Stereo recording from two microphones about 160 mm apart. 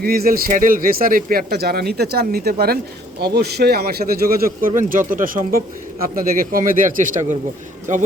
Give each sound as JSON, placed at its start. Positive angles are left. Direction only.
{"t": 0.0, "sound": "speech", "side_deg": -70}
{"t": 3.2, "sound": "speech", "side_deg": -90}